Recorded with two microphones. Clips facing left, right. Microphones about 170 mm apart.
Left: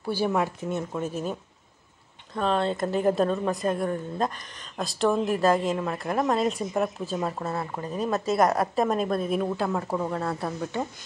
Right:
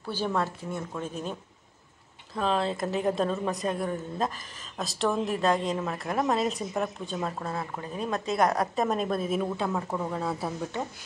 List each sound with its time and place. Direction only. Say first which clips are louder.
0.0 s speech: left 4 dB; 10° left (ahead or behind)
0.7 s speech: left 5 dB; 25° left (ahead or behind)
1.0 s speech: left 4 dB; 5° left (ahead or behind)
2.3 s a woman's voice: left 2 dB; centre (ahead or behind)